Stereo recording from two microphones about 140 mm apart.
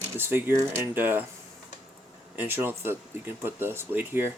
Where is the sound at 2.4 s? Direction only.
15° right (ahead or behind).